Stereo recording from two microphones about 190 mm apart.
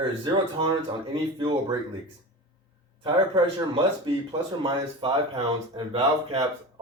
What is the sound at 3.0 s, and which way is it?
Speech, 25° right (ahead or behind).